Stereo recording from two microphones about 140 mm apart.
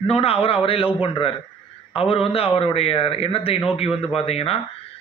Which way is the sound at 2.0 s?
45° left (ahead or behind).